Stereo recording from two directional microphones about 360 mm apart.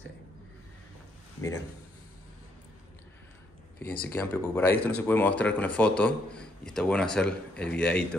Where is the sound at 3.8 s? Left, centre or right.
Left.